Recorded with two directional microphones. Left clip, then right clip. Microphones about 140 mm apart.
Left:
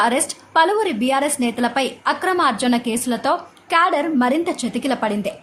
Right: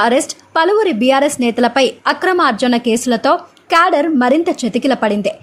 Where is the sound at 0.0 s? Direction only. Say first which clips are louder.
Right 5 dB; 35° right (ahead or behind).